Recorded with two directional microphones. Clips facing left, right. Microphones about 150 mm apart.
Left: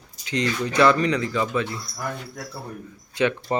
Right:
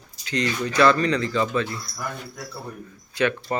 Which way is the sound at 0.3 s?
20° left (ahead or behind).